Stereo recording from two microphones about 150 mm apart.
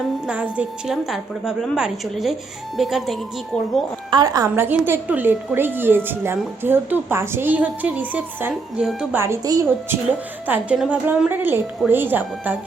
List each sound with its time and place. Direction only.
0.3 s a woman's voice: 10° right (ahead or behind)
4.1 s a woman's voice: 25° right (ahead or behind)
10.4 s a woman's voice: 10° right (ahead or behind)